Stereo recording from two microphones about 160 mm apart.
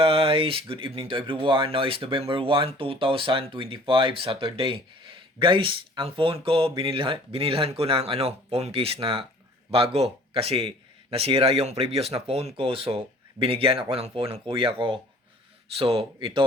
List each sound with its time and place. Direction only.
0.0 s speech: 35° right (ahead or behind)